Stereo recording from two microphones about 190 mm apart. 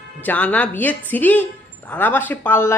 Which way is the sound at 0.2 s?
10° left (ahead or behind).